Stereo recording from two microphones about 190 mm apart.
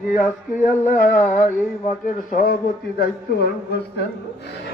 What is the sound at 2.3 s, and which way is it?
Speech, 50° left (ahead or behind).